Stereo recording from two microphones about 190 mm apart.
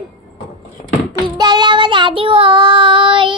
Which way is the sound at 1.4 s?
25° right (ahead or behind).